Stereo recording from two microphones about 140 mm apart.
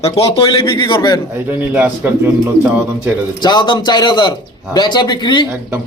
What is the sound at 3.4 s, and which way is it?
Speech, 35° left (ahead or behind).